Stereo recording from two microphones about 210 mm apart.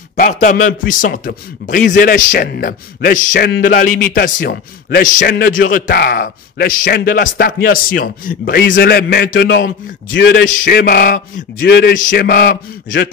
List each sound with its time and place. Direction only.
0.1 s a man's voice: 35° left (ahead or behind)
8.6 s a man's voice: 55° left (ahead or behind)